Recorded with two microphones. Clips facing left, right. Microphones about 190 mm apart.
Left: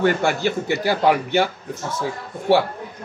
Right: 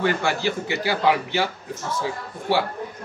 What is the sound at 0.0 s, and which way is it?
Speech, 50° left (ahead or behind).